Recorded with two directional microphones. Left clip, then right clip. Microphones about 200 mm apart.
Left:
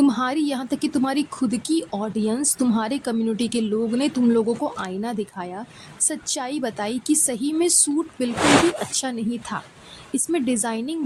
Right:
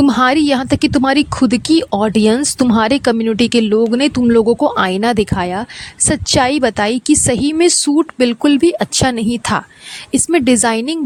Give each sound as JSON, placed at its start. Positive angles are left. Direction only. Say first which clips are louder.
{"t": 0.0, "sound": "speech", "louder": "right 9 dB", "side_deg": -50}
{"t": 4.8, "sound": "a woman's voice", "louder": "right 14 dB", "side_deg": -55}